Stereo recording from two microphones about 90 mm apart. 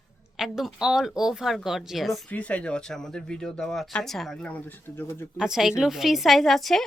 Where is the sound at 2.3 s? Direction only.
15° left (ahead or behind).